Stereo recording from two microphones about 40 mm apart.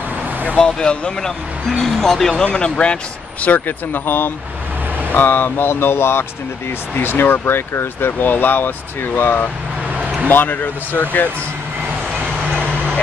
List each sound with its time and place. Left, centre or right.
0.6 s speech: left
1.8 s speech: centre
2.4 s speech: left
3.4 s speech: left
7.0 s speech: left
8.2 s speech: left